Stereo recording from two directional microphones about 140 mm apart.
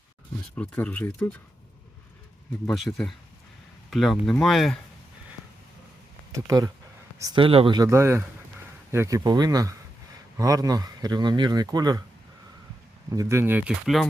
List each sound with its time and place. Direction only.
0.5 s speech: 10° left (ahead or behind)
2.6 s speech: centre (ahead or behind)
7.3 s speech: 40° right (ahead or behind)
7.8 s speech: 20° right (ahead or behind)
13.1 s speech: 20° right (ahead or behind)
13.8 s speech: centre (ahead or behind)